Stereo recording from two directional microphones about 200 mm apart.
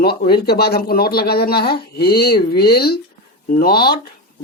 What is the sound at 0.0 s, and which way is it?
Speech, 50° left (ahead or behind).